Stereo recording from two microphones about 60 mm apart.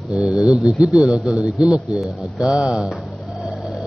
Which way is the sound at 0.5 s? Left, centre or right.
Centre.